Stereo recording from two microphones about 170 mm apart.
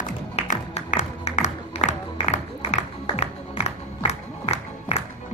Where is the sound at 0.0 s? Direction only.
45° left (ahead or behind).